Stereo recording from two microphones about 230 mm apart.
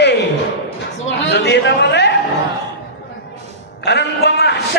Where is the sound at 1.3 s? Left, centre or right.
Left.